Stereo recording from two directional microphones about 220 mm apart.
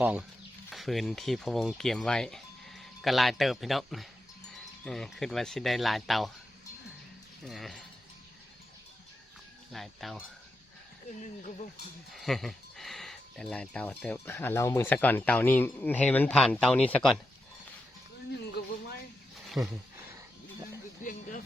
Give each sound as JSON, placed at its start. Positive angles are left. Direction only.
{"t": 0.0, "sound": "speech", "side_deg": -5}
{"t": 7.4, "sound": "speech", "side_deg": 0}
{"t": 9.7, "sound": "speech", "side_deg": 0}
{"t": 11.2, "sound": "speech", "side_deg": 35}
{"t": 12.1, "sound": "speech", "side_deg": 0}
{"t": 21.0, "sound": "a sound", "side_deg": 35}